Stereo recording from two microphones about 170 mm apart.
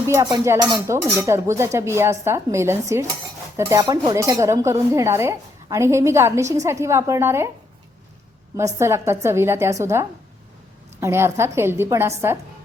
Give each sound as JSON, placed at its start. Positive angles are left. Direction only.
{"t": 0.1, "sound": "speech", "side_deg": -15}
{"t": 8.5, "sound": "speech", "side_deg": -15}